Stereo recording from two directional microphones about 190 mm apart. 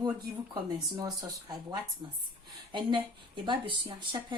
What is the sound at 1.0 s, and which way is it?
A woman's voice, 20° right (ahead or behind).